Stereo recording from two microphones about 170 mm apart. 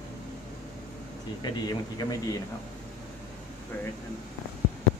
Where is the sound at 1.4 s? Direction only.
25° left (ahead or behind).